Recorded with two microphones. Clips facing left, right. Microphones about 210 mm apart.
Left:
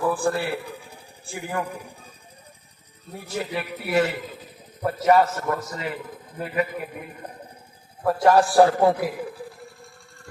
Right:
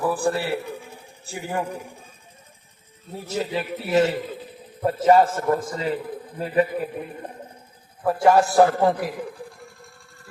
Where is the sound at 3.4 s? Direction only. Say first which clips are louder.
Right 3 dB; 25° right (ahead or behind).